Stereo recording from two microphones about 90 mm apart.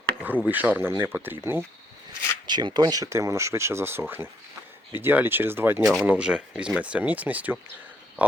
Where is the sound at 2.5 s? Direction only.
55° right (ahead or behind).